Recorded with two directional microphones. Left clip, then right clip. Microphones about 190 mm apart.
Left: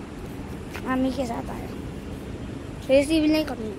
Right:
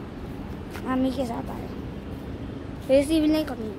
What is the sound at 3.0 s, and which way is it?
Speech, 60° right (ahead or behind).